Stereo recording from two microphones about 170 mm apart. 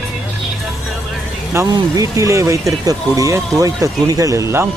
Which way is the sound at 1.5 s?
20° right (ahead or behind).